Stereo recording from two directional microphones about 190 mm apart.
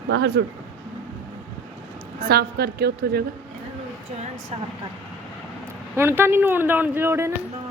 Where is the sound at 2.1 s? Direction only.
55° right (ahead or behind).